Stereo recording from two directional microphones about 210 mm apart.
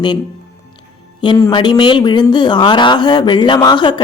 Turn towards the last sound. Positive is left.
turn(degrees=20)  # may be behind; listen again after turning